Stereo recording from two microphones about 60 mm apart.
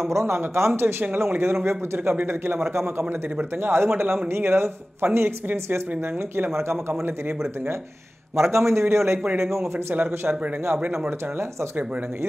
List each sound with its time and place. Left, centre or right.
0.1 s speech: right
6.9 s speech: right
8.4 s speech: right
9.9 s speech: right